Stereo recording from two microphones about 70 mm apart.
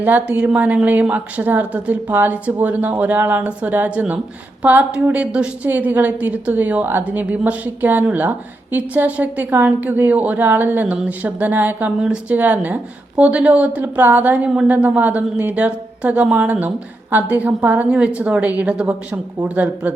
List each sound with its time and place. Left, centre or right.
0.0 s a woman's voice: right
11.9 s a woman's voice: centre